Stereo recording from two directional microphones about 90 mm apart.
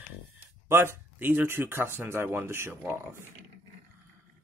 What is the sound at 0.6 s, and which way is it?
Speech, 25° right (ahead or behind).